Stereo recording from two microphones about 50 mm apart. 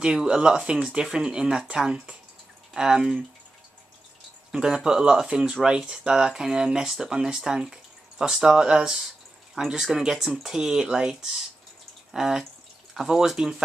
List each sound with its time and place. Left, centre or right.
0.0 s speech: centre
4.5 s speech: centre